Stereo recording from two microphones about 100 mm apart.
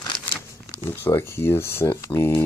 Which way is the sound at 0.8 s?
25° left (ahead or behind).